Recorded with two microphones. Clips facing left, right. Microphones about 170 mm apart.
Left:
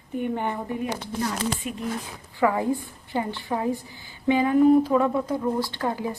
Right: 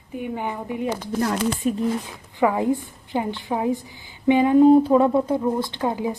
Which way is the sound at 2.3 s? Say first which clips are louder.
Right 2 dB; 20° right (ahead or behind).